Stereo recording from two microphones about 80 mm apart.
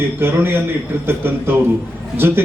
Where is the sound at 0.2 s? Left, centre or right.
Right.